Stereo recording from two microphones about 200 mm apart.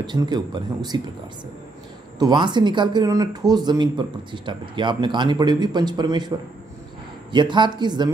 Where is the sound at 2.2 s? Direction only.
25° right (ahead or behind).